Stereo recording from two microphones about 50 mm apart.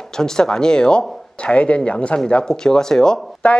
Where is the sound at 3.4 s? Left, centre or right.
Left.